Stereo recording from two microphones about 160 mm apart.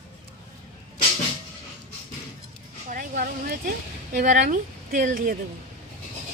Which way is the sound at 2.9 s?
60° right (ahead or behind).